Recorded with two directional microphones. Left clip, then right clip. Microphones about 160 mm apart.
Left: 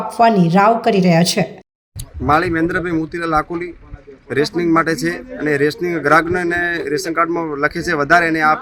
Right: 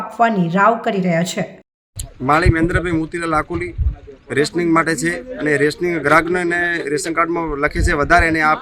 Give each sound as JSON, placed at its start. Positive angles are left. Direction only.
{"t": 0.2, "sound": "speech", "side_deg": 5}
{"t": 2.2, "sound": "a man's voice", "side_deg": -5}